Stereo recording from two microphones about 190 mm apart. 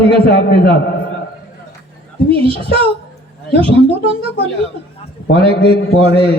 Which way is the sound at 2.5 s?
30° right (ahead or behind).